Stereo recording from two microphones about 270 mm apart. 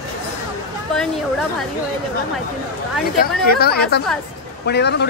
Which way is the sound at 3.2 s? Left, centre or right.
Left.